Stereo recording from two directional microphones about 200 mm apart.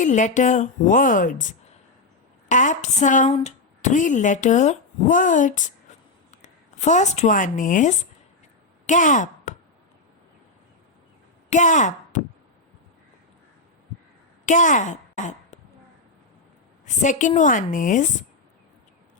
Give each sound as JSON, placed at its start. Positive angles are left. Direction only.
{"t": 0.0, "sound": "a woman's voice", "side_deg": 40}
{"t": 11.4, "sound": "speech", "side_deg": 35}
{"t": 14.4, "sound": "a woman's voice", "side_deg": 40}
{"t": 16.8, "sound": "a woman's voice", "side_deg": 40}